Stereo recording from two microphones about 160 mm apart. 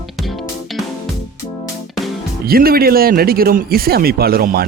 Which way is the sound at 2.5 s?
70° right (ahead or behind).